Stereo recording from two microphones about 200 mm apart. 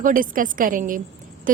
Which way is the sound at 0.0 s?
45° right (ahead or behind).